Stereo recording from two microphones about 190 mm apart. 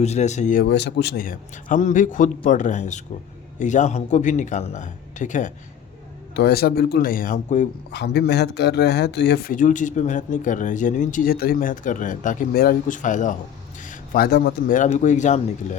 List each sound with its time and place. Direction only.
0.0 s a man's voice: 35° left (ahead or behind)
0.6 s a man's voice: 65° left (ahead or behind); by 5.5 s 40° left (ahead or behind)
6.3 s speech: 55° left (ahead or behind)
7.9 s a man's voice: 60° left (ahead or behind)
14.8 s a man's voice: 40° left (ahead or behind)